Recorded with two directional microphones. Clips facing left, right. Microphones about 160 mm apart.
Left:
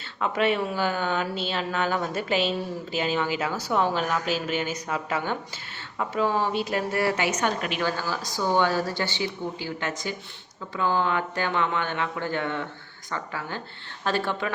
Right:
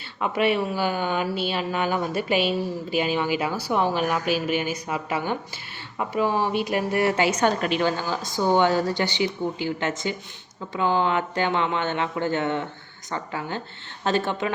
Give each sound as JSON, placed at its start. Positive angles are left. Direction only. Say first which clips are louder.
{"t": 0.2, "sound": "a woman's voice", "louder": "right 2 dB", "side_deg": -10}
{"t": 7.2, "sound": "a woman's voice", "louder": "right 5 dB", "side_deg": -35}
{"t": 7.8, "sound": "speech", "louder": "right 3 dB", "side_deg": -20}